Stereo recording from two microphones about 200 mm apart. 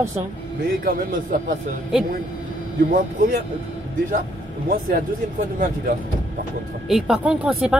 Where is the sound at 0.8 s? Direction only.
45° right (ahead or behind).